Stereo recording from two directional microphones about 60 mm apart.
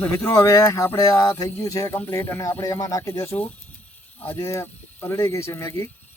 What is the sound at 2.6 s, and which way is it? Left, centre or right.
Speech, left.